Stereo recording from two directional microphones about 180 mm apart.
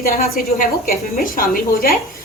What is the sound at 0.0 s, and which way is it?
A woman's voice, 55° left (ahead or behind).